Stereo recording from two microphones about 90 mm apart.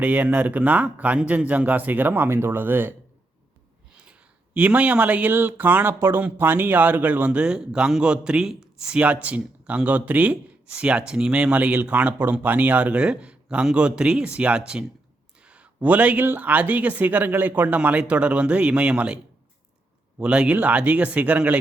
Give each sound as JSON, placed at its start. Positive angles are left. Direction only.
{"t": 0.0, "sound": "speech", "side_deg": -20}
{"t": 3.9, "sound": "speech", "side_deg": -10}
{"t": 20.2, "sound": "speech", "side_deg": -10}